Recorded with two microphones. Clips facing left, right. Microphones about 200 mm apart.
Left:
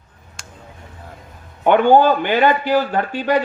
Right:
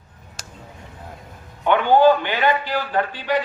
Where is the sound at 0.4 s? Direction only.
40° right (ahead or behind).